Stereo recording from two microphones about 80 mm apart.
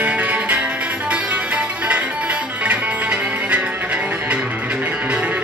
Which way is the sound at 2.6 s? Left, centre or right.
Right.